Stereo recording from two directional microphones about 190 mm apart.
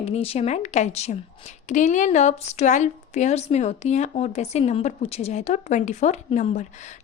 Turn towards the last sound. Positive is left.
turn(degrees=40)  # may be behind; listen again after turning